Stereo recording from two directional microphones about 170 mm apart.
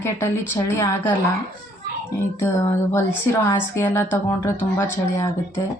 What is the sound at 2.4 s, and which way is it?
Speech, 15° left (ahead or behind).